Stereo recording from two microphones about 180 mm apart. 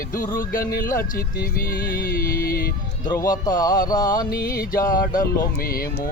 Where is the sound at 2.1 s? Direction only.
55° left (ahead or behind).